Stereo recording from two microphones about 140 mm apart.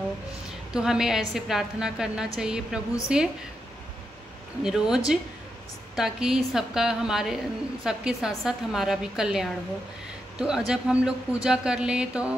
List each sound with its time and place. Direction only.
0.7 s a woman's voice: 5° right (ahead or behind)
4.6 s a woman's voice: 5° right (ahead or behind)